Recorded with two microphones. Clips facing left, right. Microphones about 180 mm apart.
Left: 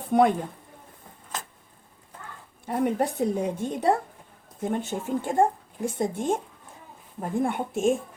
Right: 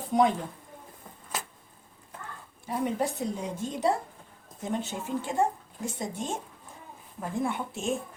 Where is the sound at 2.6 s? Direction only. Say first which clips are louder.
Left 4 dB; 60° left (ahead or behind).